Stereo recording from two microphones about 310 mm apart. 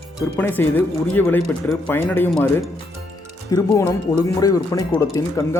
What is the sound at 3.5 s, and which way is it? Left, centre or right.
Speech, centre.